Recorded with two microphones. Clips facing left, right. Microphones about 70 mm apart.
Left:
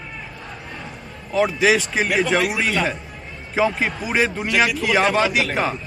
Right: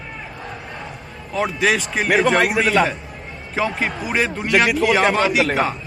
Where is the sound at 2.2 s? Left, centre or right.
Right.